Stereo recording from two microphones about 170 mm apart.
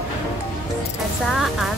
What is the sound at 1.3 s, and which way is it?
Speech, centre (ahead or behind).